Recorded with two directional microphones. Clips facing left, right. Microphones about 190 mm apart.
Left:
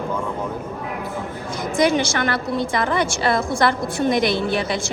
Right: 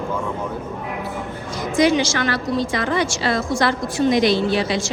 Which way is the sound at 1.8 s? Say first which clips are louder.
Right 2 dB; 50° left (ahead or behind).